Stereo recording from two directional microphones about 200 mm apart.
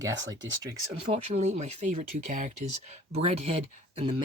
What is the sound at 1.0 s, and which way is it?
Speech, 30° right (ahead or behind).